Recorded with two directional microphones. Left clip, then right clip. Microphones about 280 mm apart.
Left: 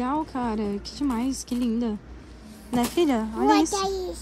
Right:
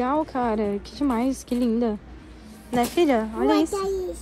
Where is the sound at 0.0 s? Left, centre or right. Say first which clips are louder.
Right 4 dB; centre.